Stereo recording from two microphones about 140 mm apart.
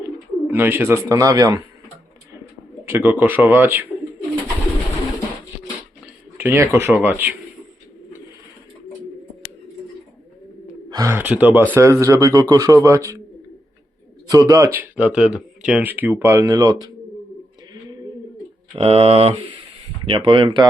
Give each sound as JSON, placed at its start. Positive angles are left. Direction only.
{"t": 0.4, "sound": "speech", "side_deg": -15}
{"t": 2.8, "sound": "speech", "side_deg": -15}
{"t": 6.3, "sound": "speech", "side_deg": -15}
{"t": 10.8, "sound": "bird", "side_deg": -30}
{"t": 11.1, "sound": "speech", "side_deg": -10}
{"t": 14.3, "sound": "speech", "side_deg": -25}
{"t": 18.8, "sound": "speech", "side_deg": -45}